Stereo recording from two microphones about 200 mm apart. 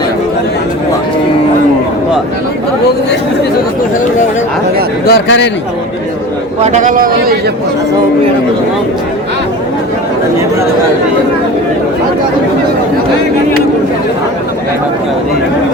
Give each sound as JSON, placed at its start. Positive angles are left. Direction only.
{"t": 5.0, "sound": "speech", "side_deg": 60}
{"t": 6.6, "sound": "a man's voice", "side_deg": -35}